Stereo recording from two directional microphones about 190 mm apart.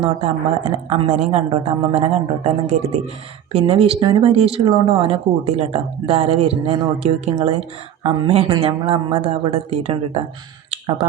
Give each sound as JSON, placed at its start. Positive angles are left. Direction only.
{"t": 0.0, "sound": "speech", "side_deg": -35}